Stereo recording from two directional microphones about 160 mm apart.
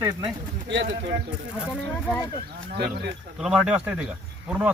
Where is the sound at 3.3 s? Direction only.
5° right (ahead or behind).